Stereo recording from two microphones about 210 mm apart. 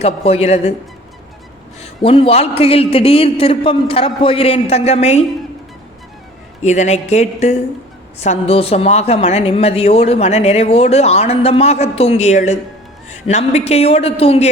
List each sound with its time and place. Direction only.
0.0 s speech: 30° left (ahead or behind)
1.8 s speech: 25° left (ahead or behind)
6.6 s a woman's voice: 35° left (ahead or behind)